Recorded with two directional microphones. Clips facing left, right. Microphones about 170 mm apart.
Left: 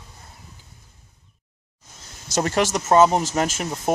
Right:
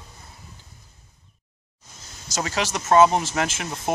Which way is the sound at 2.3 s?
50° left (ahead or behind).